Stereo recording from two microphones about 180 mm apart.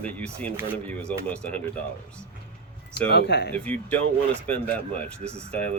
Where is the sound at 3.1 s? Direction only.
70° left (ahead or behind).